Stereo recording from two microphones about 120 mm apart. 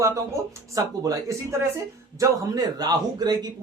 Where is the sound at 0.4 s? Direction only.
25° right (ahead or behind).